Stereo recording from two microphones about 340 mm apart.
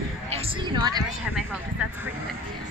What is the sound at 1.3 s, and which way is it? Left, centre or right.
Speech, centre.